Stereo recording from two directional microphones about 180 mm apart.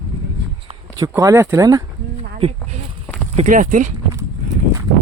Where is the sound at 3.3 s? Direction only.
45° right (ahead or behind).